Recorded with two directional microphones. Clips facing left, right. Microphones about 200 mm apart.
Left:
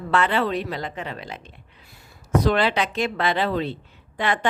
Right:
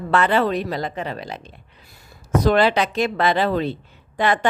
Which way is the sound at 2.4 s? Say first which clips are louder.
Right 6 dB; 40° right (ahead or behind).